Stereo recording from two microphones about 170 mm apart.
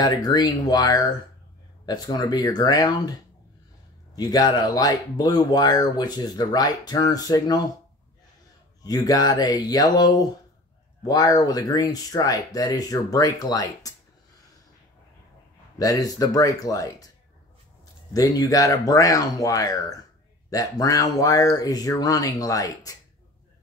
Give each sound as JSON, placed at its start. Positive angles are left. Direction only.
{"t": 0.0, "sound": "speech", "side_deg": 25}
{"t": 8.8, "sound": "speech", "side_deg": 20}
{"t": 15.8, "sound": "speech", "side_deg": 20}
{"t": 18.1, "sound": "speech", "side_deg": 20}